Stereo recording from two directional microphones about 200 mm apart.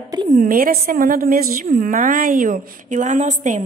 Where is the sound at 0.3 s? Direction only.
45° right (ahead or behind).